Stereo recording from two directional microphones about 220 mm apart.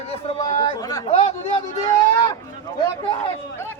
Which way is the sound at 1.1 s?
30° left (ahead or behind).